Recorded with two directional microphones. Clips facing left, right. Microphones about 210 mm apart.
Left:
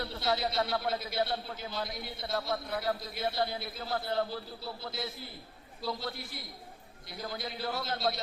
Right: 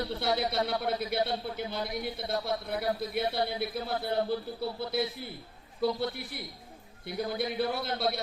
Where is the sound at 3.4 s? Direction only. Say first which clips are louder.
Right 5 dB; 60° right (ahead or behind).